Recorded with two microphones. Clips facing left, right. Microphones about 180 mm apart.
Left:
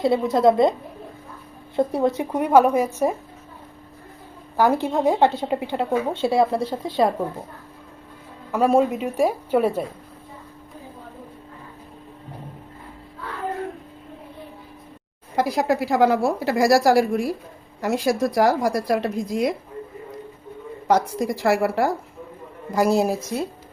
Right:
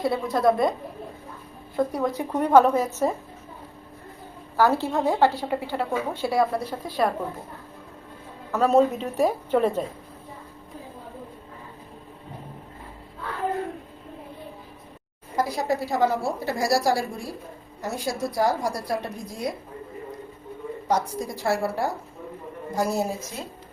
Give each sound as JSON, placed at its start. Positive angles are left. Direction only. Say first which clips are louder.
{"t": 0.0, "sound": "speech", "louder": "left 4 dB", "side_deg": 25}
{"t": 1.7, "sound": "speech", "louder": "left 4 dB", "side_deg": 25}
{"t": 2.3, "sound": "a woman's voice", "louder": "even", "side_deg": 10}
{"t": 4.5, "sound": "speech", "louder": "left 2 dB", "side_deg": 15}
{"t": 8.5, "sound": "a woman's voice", "louder": "left 1 dB", "side_deg": 10}
{"t": 15.4, "sound": "a woman's voice", "louder": "left 4 dB", "side_deg": 90}
{"t": 20.8, "sound": "a woman's voice", "louder": "left 6 dB", "side_deg": 90}